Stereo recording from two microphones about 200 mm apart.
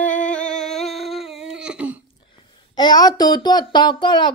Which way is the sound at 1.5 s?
5° right (ahead or behind).